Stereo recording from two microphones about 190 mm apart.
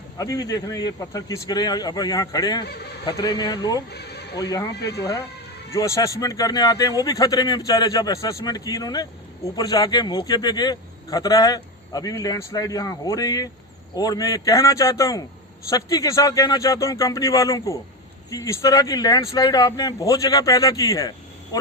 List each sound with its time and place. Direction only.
0.2 s a man's voice: 20° left (ahead or behind)
3.9 s bleat: 60° left (ahead or behind)
4.4 s a man's voice: 20° left (ahead or behind)
4.7 s speech: 60° left (ahead or behind)
5.7 s a man's voice: 15° left (ahead or behind)